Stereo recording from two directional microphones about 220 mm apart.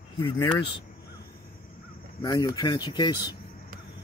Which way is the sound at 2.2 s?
15° left (ahead or behind).